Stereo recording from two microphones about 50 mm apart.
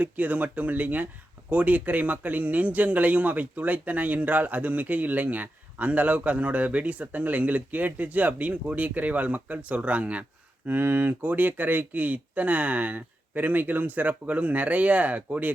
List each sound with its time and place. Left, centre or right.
0.0 s a man's voice: right
10.7 s a man's voice: right